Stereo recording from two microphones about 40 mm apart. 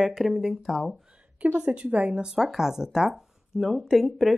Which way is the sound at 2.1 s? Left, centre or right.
Centre.